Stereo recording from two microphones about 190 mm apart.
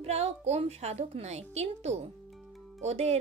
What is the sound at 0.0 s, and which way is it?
A woman's voice, 35° right (ahead or behind).